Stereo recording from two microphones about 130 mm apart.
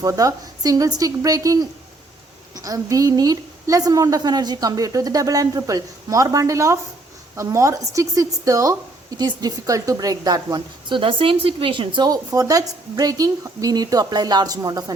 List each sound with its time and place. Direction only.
0.0 s a woman's voice: 25° right (ahead or behind)